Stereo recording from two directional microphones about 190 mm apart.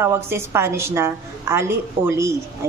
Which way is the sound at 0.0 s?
15° right (ahead or behind).